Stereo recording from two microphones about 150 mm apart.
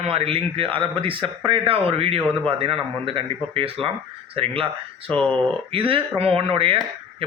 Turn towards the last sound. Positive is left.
turn(degrees=-40)  # may be behind; listen again after turning